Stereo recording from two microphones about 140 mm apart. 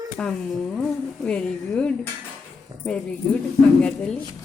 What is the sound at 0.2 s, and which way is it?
A woman's voice, 5° left (ahead or behind).